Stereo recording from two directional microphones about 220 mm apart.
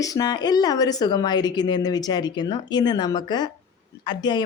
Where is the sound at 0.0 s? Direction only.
15° left (ahead or behind).